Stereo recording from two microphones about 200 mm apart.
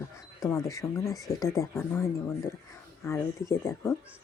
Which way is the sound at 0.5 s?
15° left (ahead or behind).